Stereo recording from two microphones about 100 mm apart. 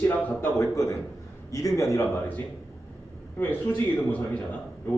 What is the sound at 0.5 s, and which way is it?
A man's voice, 30° left (ahead or behind).